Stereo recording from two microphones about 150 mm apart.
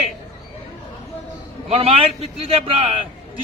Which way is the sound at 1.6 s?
40° right (ahead or behind).